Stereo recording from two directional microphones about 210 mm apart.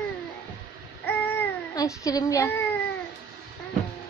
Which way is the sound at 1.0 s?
10° left (ahead or behind).